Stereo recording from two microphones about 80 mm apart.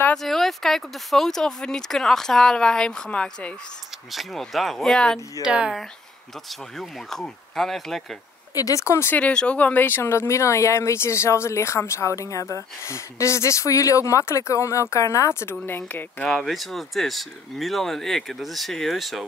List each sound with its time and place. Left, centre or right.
0.1 s speech: centre
4.1 s speech: centre
5.4 s speech: centre
6.8 s speech: centre
8.5 s speech: left
9.1 s speech: centre; by 15.5 s left
15.9 s speech: left
16.3 s speech: centre